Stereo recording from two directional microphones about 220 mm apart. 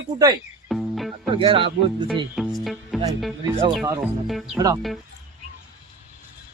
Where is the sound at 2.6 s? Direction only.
Centre (ahead or behind).